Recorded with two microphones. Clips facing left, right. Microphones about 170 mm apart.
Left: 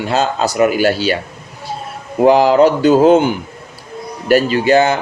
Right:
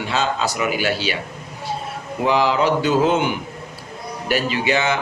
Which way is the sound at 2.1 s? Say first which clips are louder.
Left 9 dB; 45° left (ahead or behind).